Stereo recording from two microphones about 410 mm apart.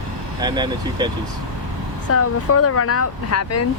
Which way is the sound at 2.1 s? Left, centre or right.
Left.